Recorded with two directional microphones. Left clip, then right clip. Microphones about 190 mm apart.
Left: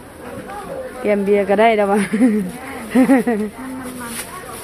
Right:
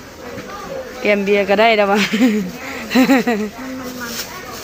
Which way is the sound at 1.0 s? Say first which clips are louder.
Right 1 dB; 10° left (ahead or behind).